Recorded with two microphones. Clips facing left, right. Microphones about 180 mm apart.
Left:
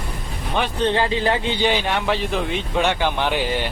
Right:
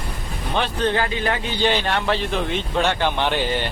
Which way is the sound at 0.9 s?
25° left (ahead or behind).